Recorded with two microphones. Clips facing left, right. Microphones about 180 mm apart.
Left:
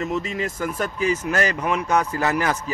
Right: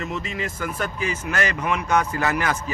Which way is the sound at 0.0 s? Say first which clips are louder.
Left 4 dB; 45° left (ahead or behind).